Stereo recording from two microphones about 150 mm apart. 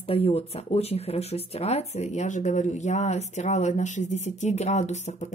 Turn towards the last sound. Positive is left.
turn(degrees=50)  # may be behind; listen again after turning